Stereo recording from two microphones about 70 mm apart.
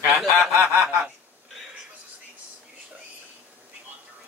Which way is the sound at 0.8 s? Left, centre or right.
Centre.